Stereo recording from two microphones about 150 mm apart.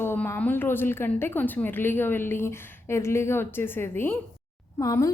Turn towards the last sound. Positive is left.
turn(degrees=20)  # may be behind; listen again after turning